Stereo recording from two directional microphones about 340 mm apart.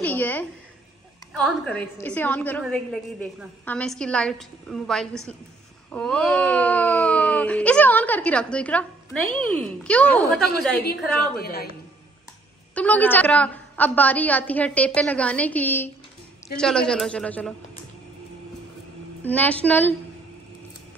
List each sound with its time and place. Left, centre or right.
0.0 s a sound: centre
1.3 s speech: centre
11.3 s a woman's voice: left
12.7 s speech: centre
19.2 s speech: centre